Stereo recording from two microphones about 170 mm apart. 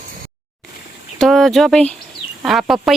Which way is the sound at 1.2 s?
Centre (ahead or behind).